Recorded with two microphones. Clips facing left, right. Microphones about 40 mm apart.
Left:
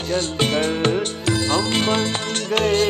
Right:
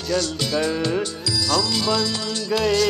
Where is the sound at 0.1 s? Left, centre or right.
Left.